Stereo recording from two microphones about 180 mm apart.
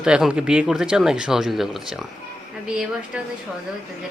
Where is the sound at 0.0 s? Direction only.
5° right (ahead or behind).